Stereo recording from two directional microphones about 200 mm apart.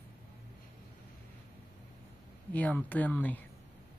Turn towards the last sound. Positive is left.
turn(degrees=10)  # may be behind; listen again after turning